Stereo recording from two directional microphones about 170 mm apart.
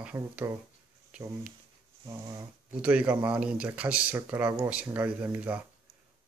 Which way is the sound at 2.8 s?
10° right (ahead or behind).